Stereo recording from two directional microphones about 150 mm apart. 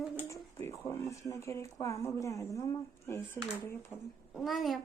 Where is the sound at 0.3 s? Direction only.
20° left (ahead or behind).